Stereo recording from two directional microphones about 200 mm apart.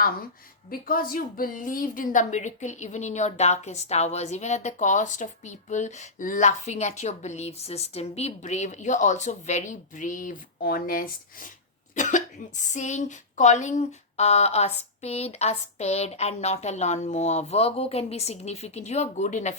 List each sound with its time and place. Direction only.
0.7 s a woman's voice: 45° left (ahead or behind)